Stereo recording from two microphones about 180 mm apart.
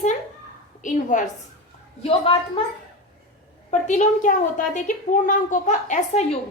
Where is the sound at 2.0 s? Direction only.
30° left (ahead or behind).